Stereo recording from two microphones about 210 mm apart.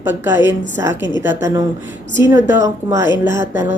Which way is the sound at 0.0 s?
10° right (ahead or behind).